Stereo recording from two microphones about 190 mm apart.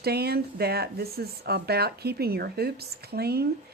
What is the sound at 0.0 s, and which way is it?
Speech, 55° right (ahead or behind).